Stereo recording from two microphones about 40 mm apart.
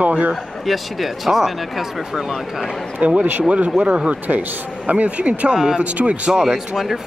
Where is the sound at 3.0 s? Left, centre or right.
Right.